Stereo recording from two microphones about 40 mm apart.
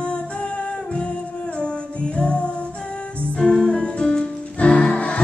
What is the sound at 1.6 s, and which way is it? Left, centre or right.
Music, left.